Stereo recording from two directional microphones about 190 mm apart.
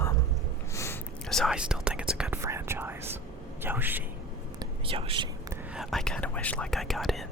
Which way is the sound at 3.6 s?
10° right (ahead or behind).